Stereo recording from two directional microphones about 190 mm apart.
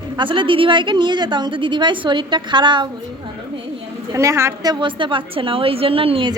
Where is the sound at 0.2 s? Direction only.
25° right (ahead or behind).